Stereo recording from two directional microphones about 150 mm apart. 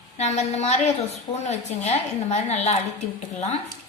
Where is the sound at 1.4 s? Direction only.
50° left (ahead or behind).